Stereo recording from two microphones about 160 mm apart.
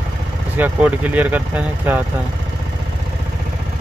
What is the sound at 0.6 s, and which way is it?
Speech, 10° right (ahead or behind).